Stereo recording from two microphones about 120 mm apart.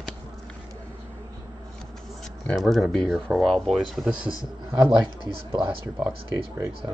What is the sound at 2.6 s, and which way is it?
A man's voice, centre (ahead or behind).